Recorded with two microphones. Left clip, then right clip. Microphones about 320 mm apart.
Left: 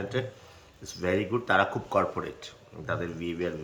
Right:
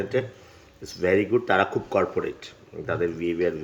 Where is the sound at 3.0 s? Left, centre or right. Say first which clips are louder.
Right 9 dB; centre.